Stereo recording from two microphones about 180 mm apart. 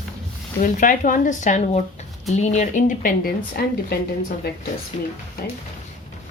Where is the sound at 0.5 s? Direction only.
45° left (ahead or behind).